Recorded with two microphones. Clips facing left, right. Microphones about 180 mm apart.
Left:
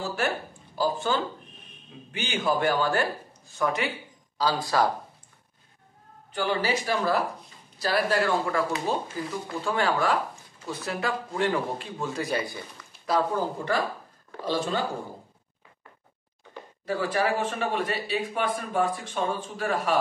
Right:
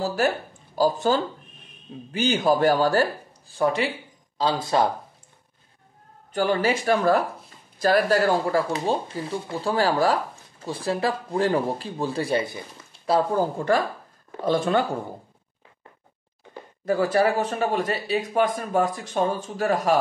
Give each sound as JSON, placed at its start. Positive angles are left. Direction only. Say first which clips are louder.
{"t": 0.0, "sound": "speech", "louder": "right 5 dB", "side_deg": -40}
{"t": 6.3, "sound": "speech", "louder": "right 4 dB", "side_deg": -45}
{"t": 13.3, "sound": "speech", "louder": "right 5 dB", "side_deg": -50}
{"t": 16.8, "sound": "speech", "louder": "right 6 dB", "side_deg": -40}